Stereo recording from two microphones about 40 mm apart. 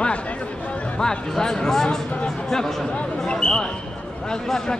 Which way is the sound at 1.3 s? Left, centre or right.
Centre.